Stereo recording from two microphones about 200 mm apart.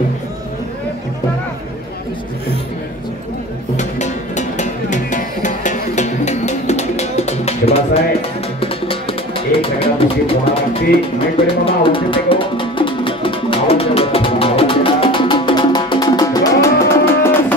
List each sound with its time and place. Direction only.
3.7 s music: 35° left (ahead or behind)
11.6 s music: 25° left (ahead or behind)